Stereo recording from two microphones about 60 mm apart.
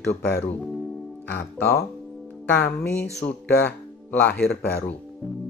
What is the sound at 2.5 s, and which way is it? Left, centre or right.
Speech, left.